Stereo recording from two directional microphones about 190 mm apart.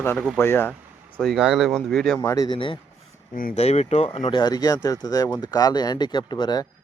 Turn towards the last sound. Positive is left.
turn(degrees=25)  # may be behind; listen again after turning